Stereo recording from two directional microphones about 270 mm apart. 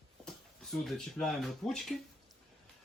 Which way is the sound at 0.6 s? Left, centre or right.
Centre.